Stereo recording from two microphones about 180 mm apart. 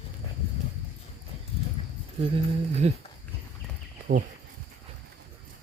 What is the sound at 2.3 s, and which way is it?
Speech, 35° right (ahead or behind).